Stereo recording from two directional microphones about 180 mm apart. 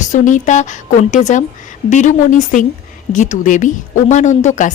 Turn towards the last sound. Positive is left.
turn(degrees=45)  # may be behind; listen again after turning